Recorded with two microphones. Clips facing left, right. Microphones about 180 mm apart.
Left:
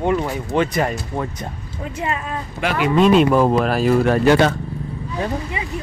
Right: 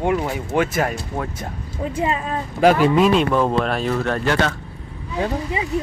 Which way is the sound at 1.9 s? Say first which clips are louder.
Right 2 dB; 30° right (ahead or behind).